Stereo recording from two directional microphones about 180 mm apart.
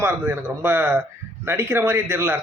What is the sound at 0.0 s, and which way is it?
A man's voice, 10° right (ahead or behind).